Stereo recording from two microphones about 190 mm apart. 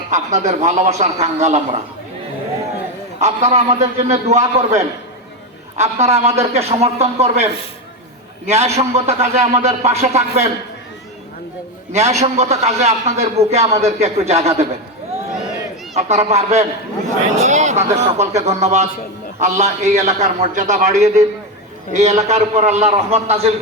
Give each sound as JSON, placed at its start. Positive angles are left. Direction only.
{"t": 0.1, "sound": "a man's voice", "side_deg": -40}
{"t": 3.2, "sound": "a man's voice", "side_deg": -35}
{"t": 11.9, "sound": "a man's voice", "side_deg": -35}
{"t": 16.0, "sound": "a man's voice", "side_deg": -35}